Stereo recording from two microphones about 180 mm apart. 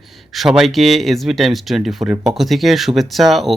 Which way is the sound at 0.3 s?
Centre (ahead or behind).